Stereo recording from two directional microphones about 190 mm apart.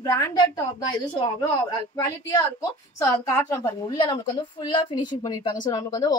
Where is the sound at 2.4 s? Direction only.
15° left (ahead or behind).